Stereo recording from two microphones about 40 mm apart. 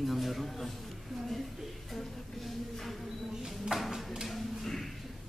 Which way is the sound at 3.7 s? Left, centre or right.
Centre.